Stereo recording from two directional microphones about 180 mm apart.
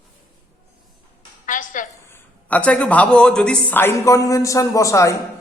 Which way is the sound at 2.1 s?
10° left (ahead or behind).